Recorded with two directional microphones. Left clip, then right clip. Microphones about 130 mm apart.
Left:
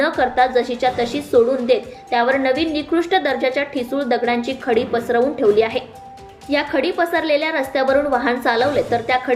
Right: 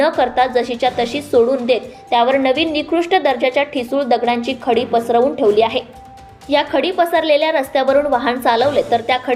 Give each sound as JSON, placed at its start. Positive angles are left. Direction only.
{"t": 0.2, "sound": "a woman's voice", "side_deg": -25}